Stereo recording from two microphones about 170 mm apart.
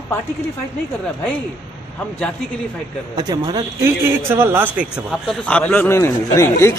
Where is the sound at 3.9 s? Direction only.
15° right (ahead or behind).